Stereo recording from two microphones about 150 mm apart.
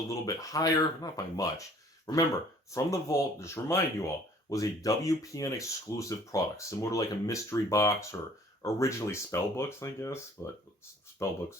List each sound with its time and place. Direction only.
0.1 s speech: 20° left (ahead or behind)